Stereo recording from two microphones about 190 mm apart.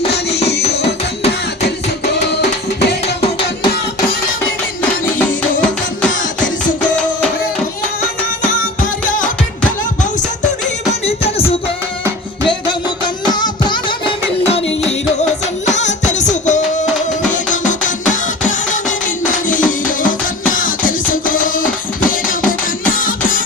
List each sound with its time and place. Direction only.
2.1 s music: 60° left (ahead or behind)
6.9 s music: 5° left (ahead or behind)
8.8 s music: 45° left (ahead or behind)
11.0 s music: 30° left (ahead or behind)
13.2 s music: 20° left (ahead or behind)
15.7 s music: 40° left (ahead or behind)